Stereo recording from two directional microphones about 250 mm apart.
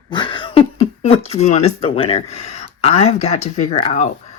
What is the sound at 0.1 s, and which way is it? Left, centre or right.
Speech, centre.